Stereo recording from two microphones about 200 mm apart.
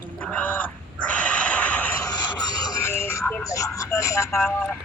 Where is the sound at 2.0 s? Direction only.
20° left (ahead or behind).